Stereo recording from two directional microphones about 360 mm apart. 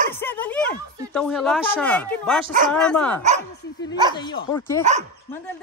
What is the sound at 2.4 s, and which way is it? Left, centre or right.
Speech, right.